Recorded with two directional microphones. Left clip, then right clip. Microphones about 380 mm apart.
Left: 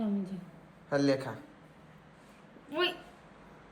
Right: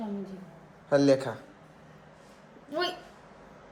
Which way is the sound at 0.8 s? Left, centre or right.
Centre.